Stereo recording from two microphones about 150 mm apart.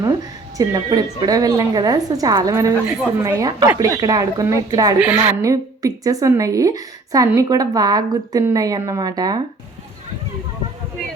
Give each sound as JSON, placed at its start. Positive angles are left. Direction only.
{"t": 0.5, "sound": "a woman's voice", "side_deg": -25}
{"t": 4.9, "sound": "a woman's voice", "side_deg": -10}
{"t": 5.4, "sound": "a woman's voice", "side_deg": -25}